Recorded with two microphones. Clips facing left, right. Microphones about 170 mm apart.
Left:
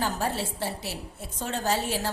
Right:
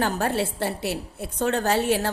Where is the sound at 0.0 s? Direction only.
65° right (ahead or behind).